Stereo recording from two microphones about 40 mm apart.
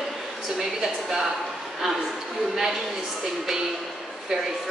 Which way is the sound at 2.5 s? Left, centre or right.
Centre.